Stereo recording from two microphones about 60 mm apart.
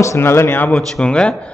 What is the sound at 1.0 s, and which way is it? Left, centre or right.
Speech, centre.